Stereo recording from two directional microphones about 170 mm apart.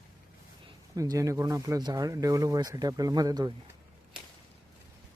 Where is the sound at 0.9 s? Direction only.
20° right (ahead or behind).